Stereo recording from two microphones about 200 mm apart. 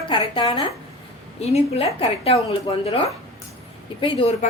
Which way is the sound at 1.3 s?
30° left (ahead or behind).